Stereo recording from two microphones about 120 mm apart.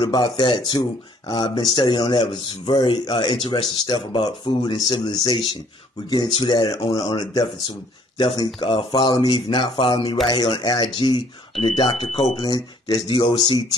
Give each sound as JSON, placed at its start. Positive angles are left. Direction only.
{"t": 0.0, "sound": "speech", "side_deg": 40}
{"t": 13.1, "sound": "speech", "side_deg": 50}